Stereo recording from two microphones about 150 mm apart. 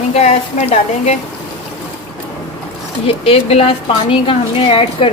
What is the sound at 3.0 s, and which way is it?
A woman's voice, 40° left (ahead or behind).